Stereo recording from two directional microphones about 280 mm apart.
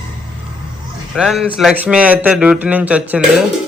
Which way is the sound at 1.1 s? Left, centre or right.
Centre.